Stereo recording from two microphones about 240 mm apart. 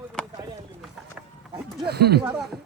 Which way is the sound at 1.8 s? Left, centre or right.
Right.